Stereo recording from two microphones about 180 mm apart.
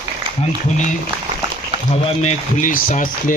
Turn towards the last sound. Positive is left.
turn(degrees=50)  # may be behind; listen again after turning